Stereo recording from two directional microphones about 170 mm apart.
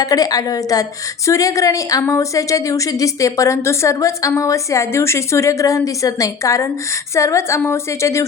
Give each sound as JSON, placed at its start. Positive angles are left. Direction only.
{"t": 0.0, "sound": "a woman's voice", "side_deg": 20}